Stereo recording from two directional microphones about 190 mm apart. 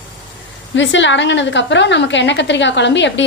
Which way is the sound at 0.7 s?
75° left (ahead or behind).